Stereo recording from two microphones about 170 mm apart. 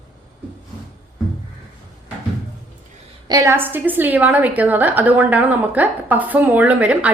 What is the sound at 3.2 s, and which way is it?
A woman's voice, 20° right (ahead or behind).